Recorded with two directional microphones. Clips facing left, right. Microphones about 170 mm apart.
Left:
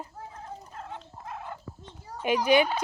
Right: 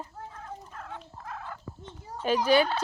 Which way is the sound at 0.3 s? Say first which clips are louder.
Left 2 dB; 25° left (ahead or behind).